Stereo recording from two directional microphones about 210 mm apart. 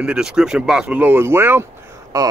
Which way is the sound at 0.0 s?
5° right (ahead or behind).